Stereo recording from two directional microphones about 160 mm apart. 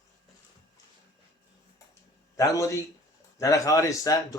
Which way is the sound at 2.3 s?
20° left (ahead or behind).